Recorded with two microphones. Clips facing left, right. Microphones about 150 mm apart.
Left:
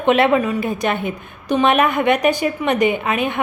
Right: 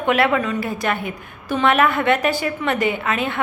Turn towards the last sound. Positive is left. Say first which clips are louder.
# left 3 dB
turn(degrees=15)  # may be behind; listen again after turning